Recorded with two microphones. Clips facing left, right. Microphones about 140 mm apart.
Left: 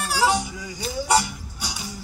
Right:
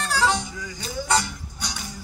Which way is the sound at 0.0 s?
10° left (ahead or behind).